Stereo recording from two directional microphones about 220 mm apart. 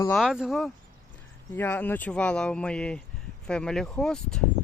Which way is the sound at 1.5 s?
10° left (ahead or behind).